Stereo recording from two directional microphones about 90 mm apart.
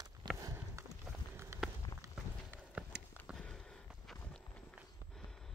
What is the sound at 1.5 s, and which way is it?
Walk, 30° right (ahead or behind).